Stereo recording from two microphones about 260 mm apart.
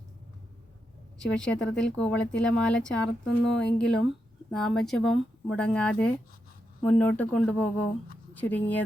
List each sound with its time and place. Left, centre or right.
1.2 s speech: centre